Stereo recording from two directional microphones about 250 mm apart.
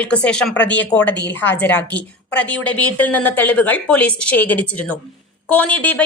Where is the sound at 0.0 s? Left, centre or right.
Centre.